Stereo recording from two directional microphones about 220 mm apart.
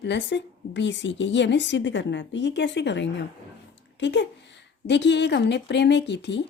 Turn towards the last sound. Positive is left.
turn(degrees=50)  # may be behind; listen again after turning